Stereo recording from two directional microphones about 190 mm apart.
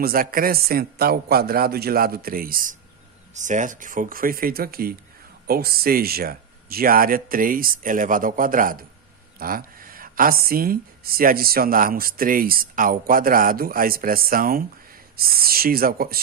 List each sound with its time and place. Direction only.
0.0 s speech: 50° right (ahead or behind)